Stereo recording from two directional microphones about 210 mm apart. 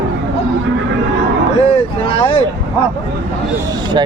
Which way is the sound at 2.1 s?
25° left (ahead or behind).